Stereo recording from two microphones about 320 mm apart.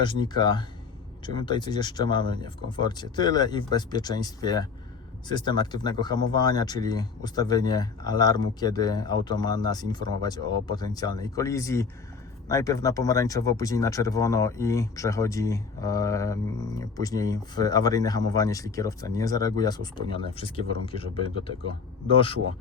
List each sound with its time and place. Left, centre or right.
0.0 s speech: centre